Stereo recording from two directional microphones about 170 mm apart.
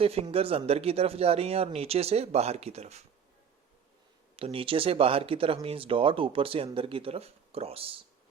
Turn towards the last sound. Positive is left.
turn(degrees=-35)  # may be behind; listen again after turning